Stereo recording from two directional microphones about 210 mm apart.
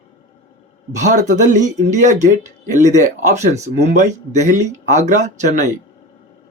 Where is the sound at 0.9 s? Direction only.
35° right (ahead or behind).